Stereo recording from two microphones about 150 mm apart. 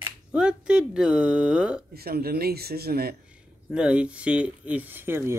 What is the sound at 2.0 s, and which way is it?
Speech, 90° right.